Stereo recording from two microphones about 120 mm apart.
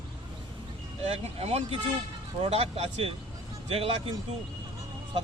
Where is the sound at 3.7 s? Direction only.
55° right (ahead or behind).